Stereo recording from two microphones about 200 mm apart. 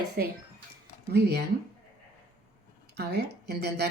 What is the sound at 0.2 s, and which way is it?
Speech, 50° right (ahead or behind).